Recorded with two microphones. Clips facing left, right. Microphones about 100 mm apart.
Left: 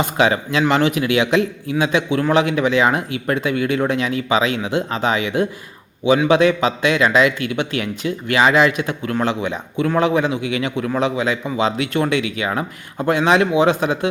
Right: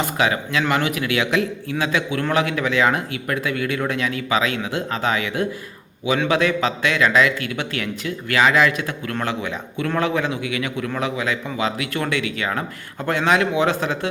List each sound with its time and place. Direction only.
0.0 s a man's voice: 25° left (ahead or behind)